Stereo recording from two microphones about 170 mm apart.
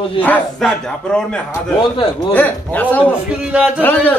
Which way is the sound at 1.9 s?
30° left (ahead or behind).